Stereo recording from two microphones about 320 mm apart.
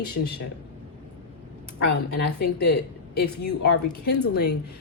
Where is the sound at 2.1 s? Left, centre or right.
Left.